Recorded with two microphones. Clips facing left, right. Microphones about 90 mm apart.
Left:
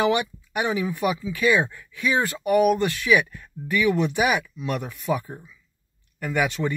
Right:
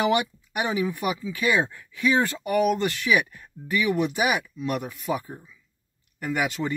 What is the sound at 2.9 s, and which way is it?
Speech, 25° right (ahead or behind).